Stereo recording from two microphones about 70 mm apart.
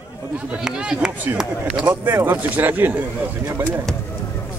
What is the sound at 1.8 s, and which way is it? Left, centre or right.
A man's voice, right.